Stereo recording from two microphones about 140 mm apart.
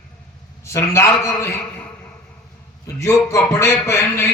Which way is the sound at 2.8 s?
20° left (ahead or behind).